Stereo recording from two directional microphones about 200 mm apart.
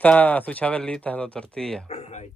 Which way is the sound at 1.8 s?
30° left (ahead or behind).